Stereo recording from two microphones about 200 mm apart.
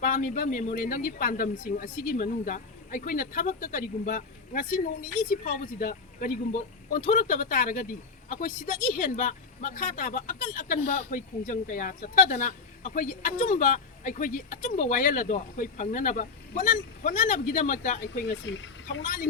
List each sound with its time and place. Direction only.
0.0 s speech: 45° left (ahead or behind)
18.1 s speech: 65° left (ahead or behind)
19.0 s speech: 40° left (ahead or behind)